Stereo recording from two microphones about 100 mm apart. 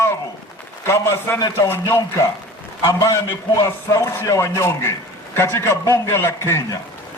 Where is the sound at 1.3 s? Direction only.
40° left (ahead or behind).